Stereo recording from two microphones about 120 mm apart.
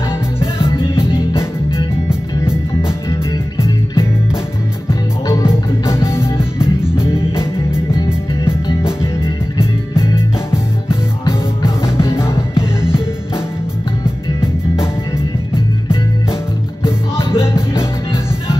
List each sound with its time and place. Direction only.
3.1 s music: 25° left (ahead or behind)
5.9 s music: 20° left (ahead or behind)
6.6 s music: 5° right (ahead or behind)
7.0 s music: 20° left (ahead or behind)
9.0 s music: 20° left (ahead or behind)
11.8 s music: 20° left (ahead or behind)